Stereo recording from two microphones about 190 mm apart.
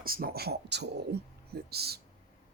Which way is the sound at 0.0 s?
50° right (ahead or behind).